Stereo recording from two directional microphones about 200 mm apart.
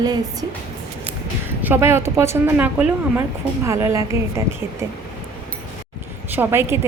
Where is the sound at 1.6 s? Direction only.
10° right (ahead or behind).